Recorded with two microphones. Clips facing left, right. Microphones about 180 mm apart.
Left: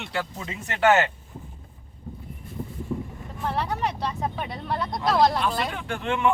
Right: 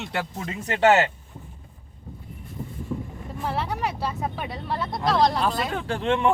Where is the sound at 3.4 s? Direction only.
5° right (ahead or behind).